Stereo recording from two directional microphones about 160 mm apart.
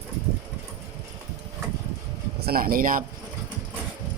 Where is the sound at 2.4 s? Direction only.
70° right (ahead or behind).